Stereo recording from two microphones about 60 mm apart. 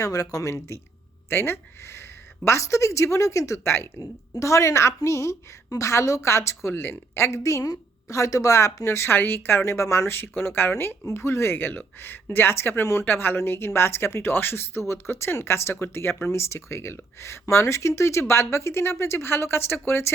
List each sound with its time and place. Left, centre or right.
0.0 s speech: left
1.3 s a woman's voice: left
2.4 s a woman's voice: left
9.1 s a woman's voice: left
11.5 s a woman's voice: left